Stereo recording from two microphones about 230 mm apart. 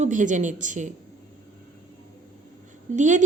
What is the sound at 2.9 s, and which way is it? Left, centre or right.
Speech, right.